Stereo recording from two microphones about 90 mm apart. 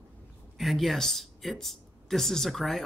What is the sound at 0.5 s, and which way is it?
Speech, centre (ahead or behind).